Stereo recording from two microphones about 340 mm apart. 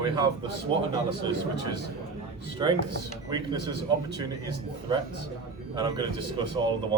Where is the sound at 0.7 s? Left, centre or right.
Centre.